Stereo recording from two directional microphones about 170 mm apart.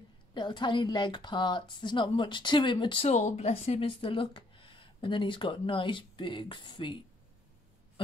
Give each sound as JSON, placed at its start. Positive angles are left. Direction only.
{"t": 0.3, "sound": "speech", "side_deg": 25}